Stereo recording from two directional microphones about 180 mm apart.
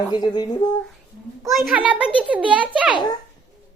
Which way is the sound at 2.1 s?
30° right (ahead or behind).